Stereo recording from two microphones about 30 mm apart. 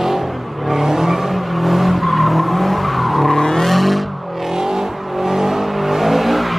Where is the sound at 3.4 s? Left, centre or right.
Centre.